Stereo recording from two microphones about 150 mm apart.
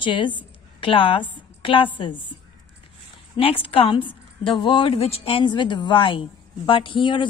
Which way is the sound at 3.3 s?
35° left (ahead or behind).